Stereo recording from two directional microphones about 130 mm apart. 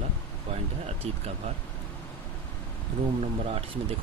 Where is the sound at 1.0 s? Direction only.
50° right (ahead or behind).